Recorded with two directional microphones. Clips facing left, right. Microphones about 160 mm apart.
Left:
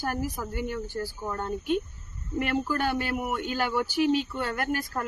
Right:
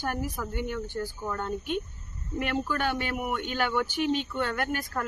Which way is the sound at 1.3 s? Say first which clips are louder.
Left 4 dB; 30° left (ahead or behind).